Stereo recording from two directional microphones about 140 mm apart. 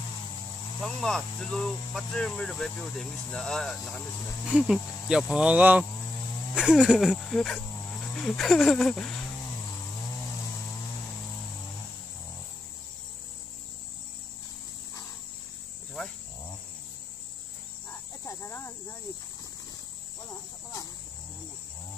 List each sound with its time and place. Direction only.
0.8 s speech: 5° left (ahead or behind)
18.2 s snake: 20° left (ahead or behind)